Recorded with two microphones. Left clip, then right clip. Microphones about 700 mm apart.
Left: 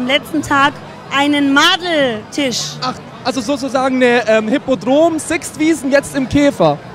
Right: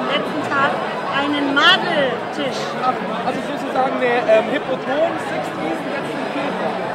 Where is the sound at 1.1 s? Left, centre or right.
Left.